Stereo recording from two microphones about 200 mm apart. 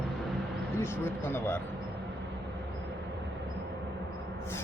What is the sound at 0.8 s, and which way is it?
Speech, 10° left (ahead or behind).